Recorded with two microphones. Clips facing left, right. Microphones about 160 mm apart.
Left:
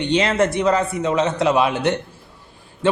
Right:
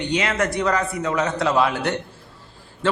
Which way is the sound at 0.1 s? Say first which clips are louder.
Left 5 dB; 30° left (ahead or behind).